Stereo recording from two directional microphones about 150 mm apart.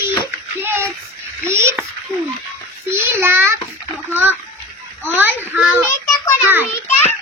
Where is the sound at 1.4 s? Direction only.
15° right (ahead or behind).